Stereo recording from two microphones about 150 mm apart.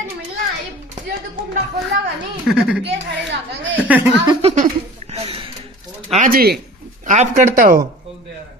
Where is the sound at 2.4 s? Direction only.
5° right (ahead or behind).